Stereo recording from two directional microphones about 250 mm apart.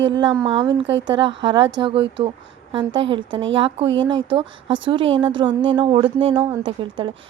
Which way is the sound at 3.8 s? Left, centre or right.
Right.